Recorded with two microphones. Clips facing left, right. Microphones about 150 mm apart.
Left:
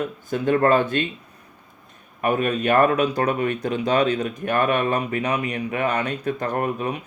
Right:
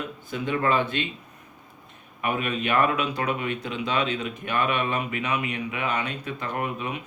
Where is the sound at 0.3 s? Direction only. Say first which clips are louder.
Left 7 dB; 45° left (ahead or behind).